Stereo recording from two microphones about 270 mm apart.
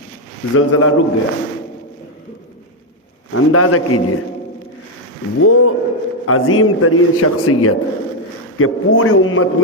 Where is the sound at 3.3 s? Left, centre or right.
Left.